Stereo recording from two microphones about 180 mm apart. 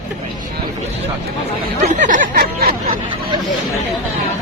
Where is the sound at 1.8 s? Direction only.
45° right (ahead or behind).